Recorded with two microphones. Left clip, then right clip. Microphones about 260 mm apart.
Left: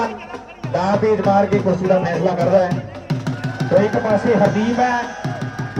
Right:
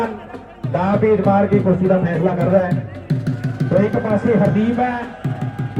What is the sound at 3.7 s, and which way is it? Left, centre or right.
Speech, left.